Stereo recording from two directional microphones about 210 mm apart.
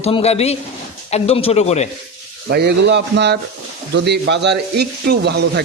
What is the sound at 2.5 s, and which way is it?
Speech, 50° right (ahead or behind).